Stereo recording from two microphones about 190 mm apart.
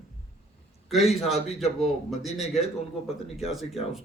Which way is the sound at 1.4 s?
35° left (ahead or behind).